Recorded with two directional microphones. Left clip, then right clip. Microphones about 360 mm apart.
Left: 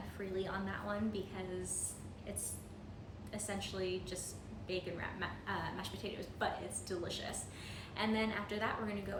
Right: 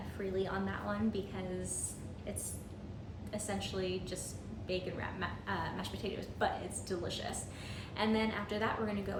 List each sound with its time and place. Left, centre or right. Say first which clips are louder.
0.3 s a woman's voice: right 3 dB; centre
3.3 s a woman's voice: right 3 dB; centre